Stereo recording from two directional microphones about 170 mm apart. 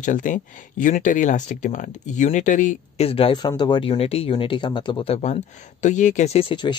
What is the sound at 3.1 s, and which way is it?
Speech, 30° left (ahead or behind).